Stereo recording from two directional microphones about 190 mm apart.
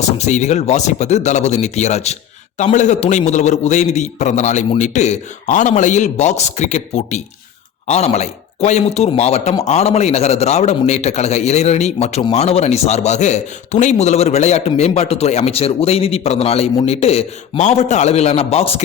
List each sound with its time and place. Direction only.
0.2 s a man's voice: 35° left (ahead or behind)